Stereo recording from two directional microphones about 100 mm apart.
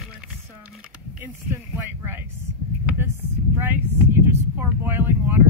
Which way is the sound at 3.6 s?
25° right (ahead or behind).